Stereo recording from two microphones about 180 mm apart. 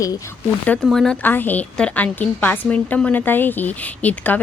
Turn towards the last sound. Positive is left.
turn(degrees=10)  # may be behind; listen again after turning